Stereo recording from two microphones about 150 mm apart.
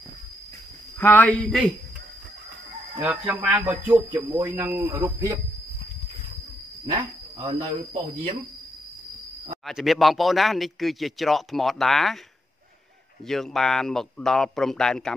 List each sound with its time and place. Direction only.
0.9 s speech: 10° left (ahead or behind)
3.0 s speech: 10° right (ahead or behind)
6.9 s speech: 35° right (ahead or behind)
9.7 s speech: centre (ahead or behind)
13.3 s speech: centre (ahead or behind)